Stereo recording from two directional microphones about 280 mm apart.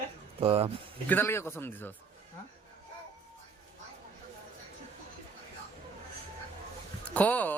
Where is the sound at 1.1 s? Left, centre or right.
Centre.